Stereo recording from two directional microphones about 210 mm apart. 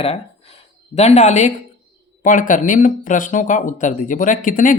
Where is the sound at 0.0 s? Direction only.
30° left (ahead or behind).